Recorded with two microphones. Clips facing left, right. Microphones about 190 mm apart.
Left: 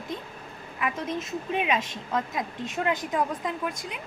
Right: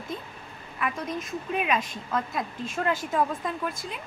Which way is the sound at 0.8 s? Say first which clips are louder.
Left 1 dB; 25° left (ahead or behind).